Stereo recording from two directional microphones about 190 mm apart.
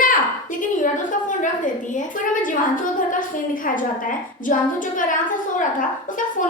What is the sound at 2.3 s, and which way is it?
Speech, 45° left (ahead or behind).